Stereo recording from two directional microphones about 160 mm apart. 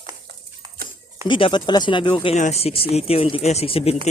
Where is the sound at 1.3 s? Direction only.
30° left (ahead or behind).